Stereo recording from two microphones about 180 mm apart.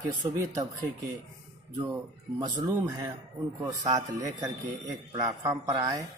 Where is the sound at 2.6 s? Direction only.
20° right (ahead or behind).